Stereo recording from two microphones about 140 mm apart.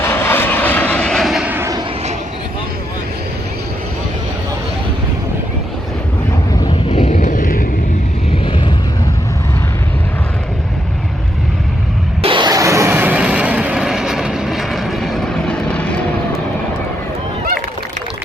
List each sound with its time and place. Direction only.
0.0 s vehicle: 15° left (ahead or behind); by 1.5 s 5° right (ahead or behind)
1.5 s vehicle: 20° right (ahead or behind)
6.7 s a sound: 40° left (ahead or behind)
7.1 s vehicle: 70° left (ahead or behind)
8.4 s vehicle: 35° left (ahead or behind)
12.2 s vehicle: 35° right (ahead or behind); by 16.0 s 10° left (ahead or behind)